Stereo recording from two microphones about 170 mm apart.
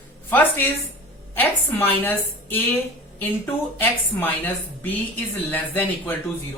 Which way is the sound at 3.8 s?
10° left (ahead or behind).